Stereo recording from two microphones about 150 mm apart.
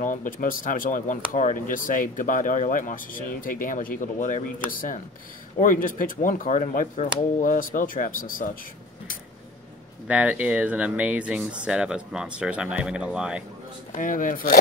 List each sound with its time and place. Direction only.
0.0 s speech: 60° left (ahead or behind)
10.0 s speech: 10° right (ahead or behind)
13.9 s speech: 65° left (ahead or behind)